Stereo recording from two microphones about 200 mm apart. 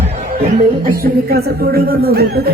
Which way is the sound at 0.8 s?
45° right (ahead or behind).